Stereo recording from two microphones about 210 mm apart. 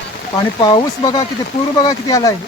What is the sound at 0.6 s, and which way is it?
Speech, 20° left (ahead or behind).